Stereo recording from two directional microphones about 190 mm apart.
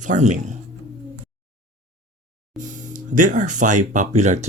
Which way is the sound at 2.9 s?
40° right (ahead or behind).